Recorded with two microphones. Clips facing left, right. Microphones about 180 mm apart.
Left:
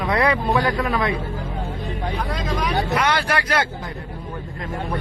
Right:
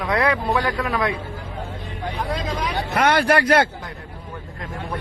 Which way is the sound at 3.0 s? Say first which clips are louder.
Right 4 dB; 55° right (ahead or behind).